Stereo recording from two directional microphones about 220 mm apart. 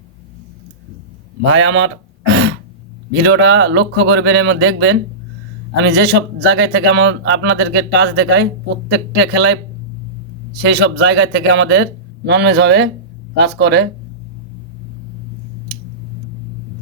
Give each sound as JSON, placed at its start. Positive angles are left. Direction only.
{"t": 1.5, "sound": "a sound", "side_deg": -65}
{"t": 3.2, "sound": "a man's voice", "side_deg": -55}
{"t": 10.6, "sound": "a man's voice", "side_deg": -55}